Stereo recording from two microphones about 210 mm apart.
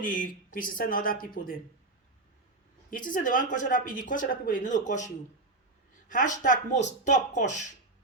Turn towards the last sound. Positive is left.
turn(degrees=35)  # may be behind; listen again after turning